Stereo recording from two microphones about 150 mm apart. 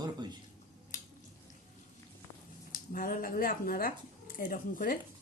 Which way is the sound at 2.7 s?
70° left (ahead or behind).